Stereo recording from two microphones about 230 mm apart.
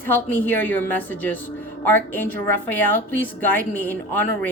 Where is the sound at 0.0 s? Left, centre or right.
Centre.